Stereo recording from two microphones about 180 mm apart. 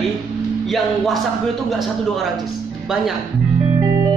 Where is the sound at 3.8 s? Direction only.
20° right (ahead or behind).